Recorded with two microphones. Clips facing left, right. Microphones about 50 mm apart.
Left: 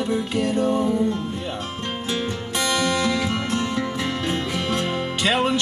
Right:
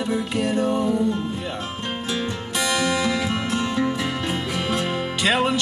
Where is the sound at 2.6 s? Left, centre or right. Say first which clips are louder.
Even; centre.